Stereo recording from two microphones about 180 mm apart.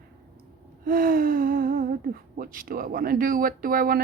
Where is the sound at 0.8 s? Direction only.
50° right (ahead or behind).